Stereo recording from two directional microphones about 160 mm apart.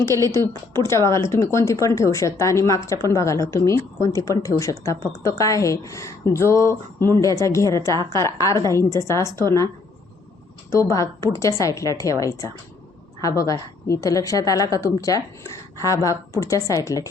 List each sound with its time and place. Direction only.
0.0 s a woman's voice: 20° left (ahead or behind)
10.7 s a woman's voice: 20° left (ahead or behind)